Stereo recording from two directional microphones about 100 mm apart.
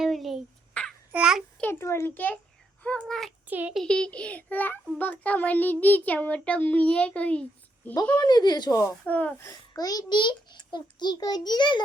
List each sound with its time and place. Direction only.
0.0 s a sound: centre (ahead or behind)
0.7 s babbling: 10° left (ahead or behind)
1.1 s a child's voice: 5° right (ahead or behind)
1.8 s a child's voice: 25° left (ahead or behind); by 3.3 s 5° left (ahead or behind)
3.4 s speech: 15° right (ahead or behind)
3.8 s a child's voice: 10° left (ahead or behind)
8.2 s a child's voice: 45° left (ahead or behind)
9.0 s a child's voice: 15° left (ahead or behind)
9.4 s a child's voice: 35° left (ahead or behind)